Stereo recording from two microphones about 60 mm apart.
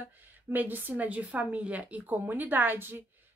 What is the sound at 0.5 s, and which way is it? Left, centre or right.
Speech, right.